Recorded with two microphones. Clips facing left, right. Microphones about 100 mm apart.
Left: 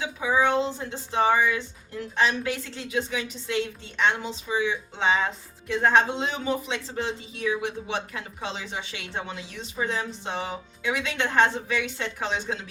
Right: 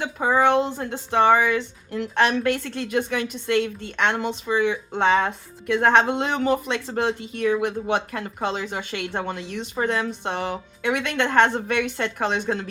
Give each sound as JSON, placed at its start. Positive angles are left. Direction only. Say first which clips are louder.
{"t": 0.0, "sound": "speech", "louder": "right 4 dB", "side_deg": -55}